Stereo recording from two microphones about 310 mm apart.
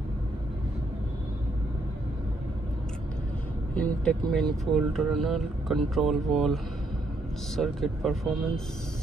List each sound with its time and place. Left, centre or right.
3.7 s speech: centre